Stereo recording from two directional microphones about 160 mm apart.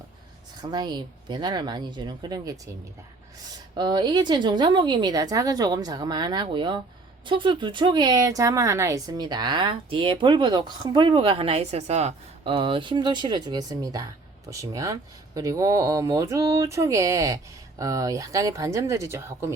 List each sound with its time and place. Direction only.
0.6 s a woman's voice: 25° right (ahead or behind)